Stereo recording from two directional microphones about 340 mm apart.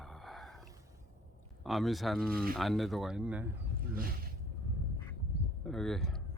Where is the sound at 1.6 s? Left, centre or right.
Centre.